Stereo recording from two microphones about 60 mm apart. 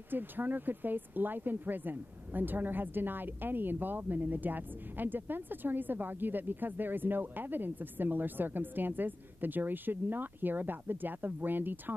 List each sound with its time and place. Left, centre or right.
0.1 s speech: right